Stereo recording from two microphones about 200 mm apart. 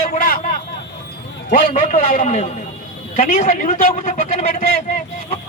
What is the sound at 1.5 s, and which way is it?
A man's voice, 35° left (ahead or behind).